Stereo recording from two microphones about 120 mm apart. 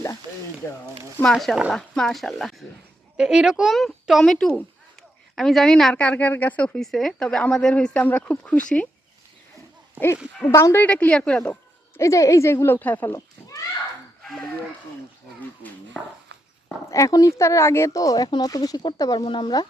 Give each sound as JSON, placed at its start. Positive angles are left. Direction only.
{"t": 0.6, "sound": "speech", "side_deg": 20}
{"t": 1.2, "sound": "a woman's voice", "side_deg": 0}
{"t": 10.5, "sound": "speech", "side_deg": 20}
{"t": 10.8, "sound": "a woman's voice", "side_deg": 10}
{"t": 11.9, "sound": "speech", "side_deg": 25}
{"t": 13.1, "sound": "a sound", "side_deg": 30}
{"t": 15.9, "sound": "a woman's voice", "side_deg": 10}
{"t": 16.9, "sound": "speech", "side_deg": 25}